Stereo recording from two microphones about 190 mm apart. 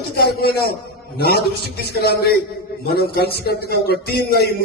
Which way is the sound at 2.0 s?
55° left (ahead or behind).